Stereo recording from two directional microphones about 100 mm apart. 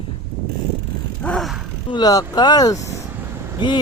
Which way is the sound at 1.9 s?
40° left (ahead or behind).